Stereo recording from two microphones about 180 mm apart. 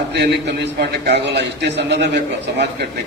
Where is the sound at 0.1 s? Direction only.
70° right (ahead or behind).